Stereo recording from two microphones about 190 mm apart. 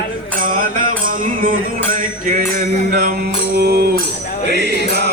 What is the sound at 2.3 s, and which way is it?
Music, 50° right (ahead or behind).